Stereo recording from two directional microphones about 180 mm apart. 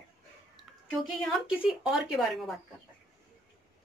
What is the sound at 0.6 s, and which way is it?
Speech, centre (ahead or behind).